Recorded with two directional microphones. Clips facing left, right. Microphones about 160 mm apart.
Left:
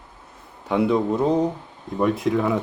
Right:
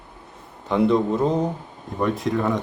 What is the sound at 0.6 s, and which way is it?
Speech, 5° left (ahead or behind).